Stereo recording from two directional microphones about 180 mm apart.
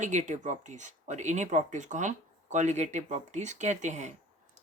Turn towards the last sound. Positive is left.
turn(degrees=-40)  # may be behind; listen again after turning